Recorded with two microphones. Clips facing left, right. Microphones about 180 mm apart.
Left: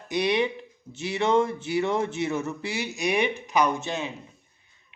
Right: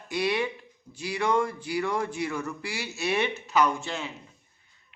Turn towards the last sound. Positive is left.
turn(degrees=20)  # may be behind; listen again after turning